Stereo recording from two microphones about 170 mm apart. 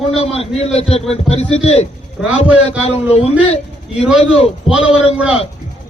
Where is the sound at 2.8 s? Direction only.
40° left (ahead or behind).